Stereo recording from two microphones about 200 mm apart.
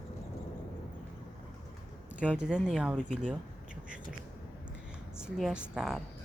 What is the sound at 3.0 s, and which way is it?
Speech, 40° right (ahead or behind).